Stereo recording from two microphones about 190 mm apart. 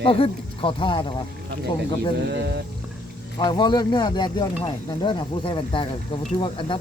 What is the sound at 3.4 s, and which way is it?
Speech, 25° left (ahead or behind).